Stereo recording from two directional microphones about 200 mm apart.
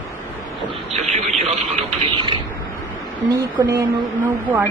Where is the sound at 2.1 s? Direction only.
25° right (ahead or behind).